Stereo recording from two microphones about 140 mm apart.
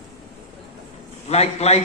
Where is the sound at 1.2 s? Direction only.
50° left (ahead or behind).